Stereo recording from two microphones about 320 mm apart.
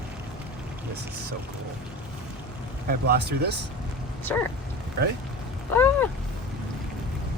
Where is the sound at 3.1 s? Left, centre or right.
Right.